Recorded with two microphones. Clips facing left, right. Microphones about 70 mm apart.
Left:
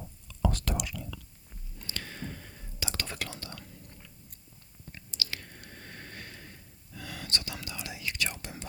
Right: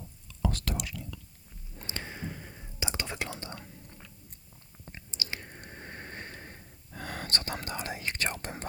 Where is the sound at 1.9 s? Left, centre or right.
Right.